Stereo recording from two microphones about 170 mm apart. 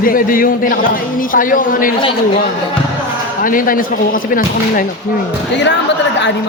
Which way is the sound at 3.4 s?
55° left (ahead or behind).